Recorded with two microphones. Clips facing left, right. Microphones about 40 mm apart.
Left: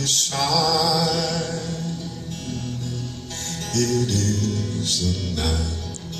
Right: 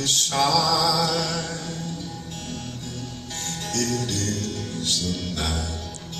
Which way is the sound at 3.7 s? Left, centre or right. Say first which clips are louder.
Left 5 dB; centre.